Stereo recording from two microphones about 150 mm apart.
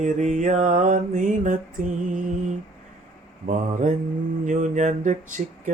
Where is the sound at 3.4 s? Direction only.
55° right (ahead or behind).